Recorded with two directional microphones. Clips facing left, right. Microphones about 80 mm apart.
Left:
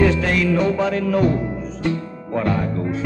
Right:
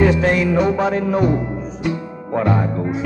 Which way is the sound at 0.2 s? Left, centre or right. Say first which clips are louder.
Right 3 dB; right.